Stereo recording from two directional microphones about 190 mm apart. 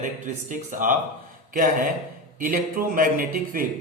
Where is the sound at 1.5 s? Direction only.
45° right (ahead or behind).